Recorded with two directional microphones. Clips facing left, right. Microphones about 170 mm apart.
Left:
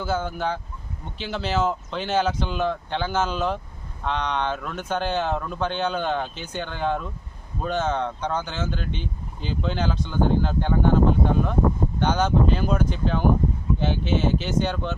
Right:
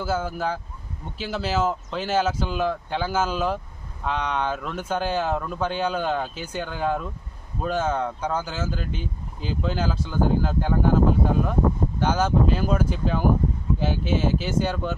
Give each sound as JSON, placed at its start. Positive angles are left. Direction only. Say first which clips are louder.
{"t": 0.0, "sound": "speech", "louder": "even", "side_deg": -5}